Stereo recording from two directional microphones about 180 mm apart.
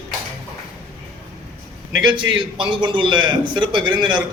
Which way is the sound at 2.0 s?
25° right (ahead or behind).